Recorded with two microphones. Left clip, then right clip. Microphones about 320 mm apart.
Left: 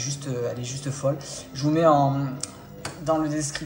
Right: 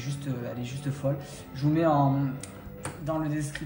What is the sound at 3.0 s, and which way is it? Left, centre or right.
Speech, centre.